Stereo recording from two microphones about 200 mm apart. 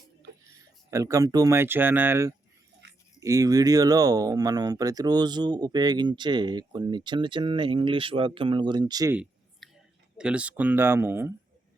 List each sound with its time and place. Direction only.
0.9 s speech: 15° right (ahead or behind)
2.8 s a sound: 60° right (ahead or behind)
3.2 s speech: 15° right (ahead or behind)
9.6 s whispering: centre (ahead or behind)
10.2 s speech: 5° right (ahead or behind)